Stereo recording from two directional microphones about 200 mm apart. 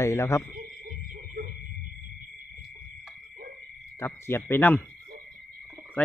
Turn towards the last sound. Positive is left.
turn(degrees=10)  # may be behind; listen again after turning